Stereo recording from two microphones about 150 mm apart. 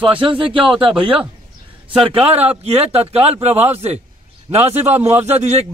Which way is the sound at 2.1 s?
45° right (ahead or behind).